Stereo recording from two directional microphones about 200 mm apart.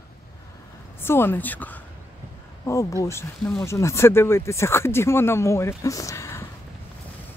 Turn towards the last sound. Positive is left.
turn(degrees=15)  # may be behind; listen again after turning